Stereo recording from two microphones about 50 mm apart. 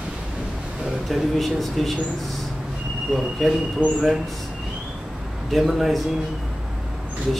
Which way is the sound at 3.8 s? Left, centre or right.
Right.